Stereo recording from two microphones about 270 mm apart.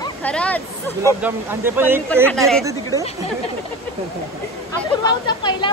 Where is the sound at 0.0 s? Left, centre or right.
Centre.